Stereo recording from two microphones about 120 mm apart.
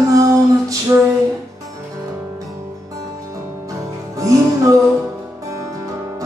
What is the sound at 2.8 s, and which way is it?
Music, 30° right (ahead or behind).